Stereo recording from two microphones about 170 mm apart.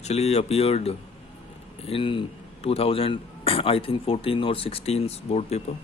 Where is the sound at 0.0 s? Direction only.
40° left (ahead or behind).